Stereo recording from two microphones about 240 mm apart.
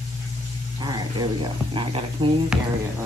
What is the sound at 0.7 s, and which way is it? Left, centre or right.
Speech, centre.